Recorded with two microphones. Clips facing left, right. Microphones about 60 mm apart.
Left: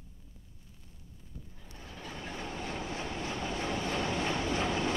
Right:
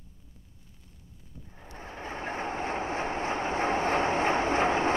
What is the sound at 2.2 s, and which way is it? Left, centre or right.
Vehicle, right.